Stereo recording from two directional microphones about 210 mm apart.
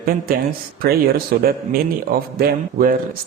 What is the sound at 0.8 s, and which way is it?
A man's voice, 45° right (ahead or behind).